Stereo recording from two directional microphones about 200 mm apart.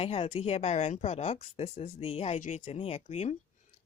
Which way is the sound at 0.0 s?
30° left (ahead or behind).